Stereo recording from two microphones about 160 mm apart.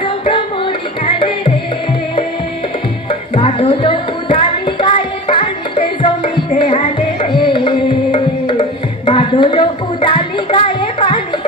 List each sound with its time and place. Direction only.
1.0 s music: 35° left (ahead or behind)
3.5 s music: 35° left (ahead or behind)
8.5 s tabla: 30° left (ahead or behind)